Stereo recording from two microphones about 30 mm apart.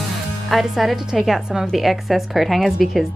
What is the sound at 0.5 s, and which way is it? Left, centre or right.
A woman's voice, centre.